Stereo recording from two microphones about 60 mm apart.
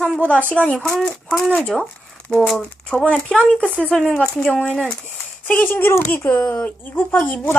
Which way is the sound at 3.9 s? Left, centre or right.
Centre.